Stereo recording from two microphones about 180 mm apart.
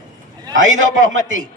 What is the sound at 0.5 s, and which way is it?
Speech, 90° right.